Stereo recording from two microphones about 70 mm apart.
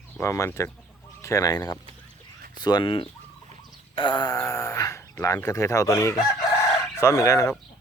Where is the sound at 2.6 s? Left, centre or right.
Left.